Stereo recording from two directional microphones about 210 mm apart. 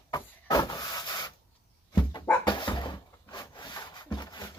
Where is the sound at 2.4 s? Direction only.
20° left (ahead or behind).